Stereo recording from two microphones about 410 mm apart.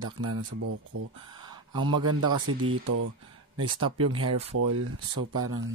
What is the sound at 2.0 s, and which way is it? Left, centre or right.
Speech, right.